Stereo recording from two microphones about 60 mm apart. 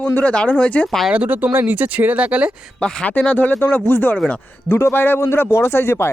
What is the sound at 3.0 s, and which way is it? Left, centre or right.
Speech, left.